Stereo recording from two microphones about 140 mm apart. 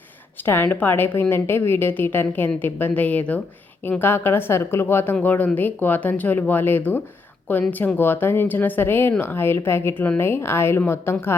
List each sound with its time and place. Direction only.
0.4 s speech: 15° left (ahead or behind)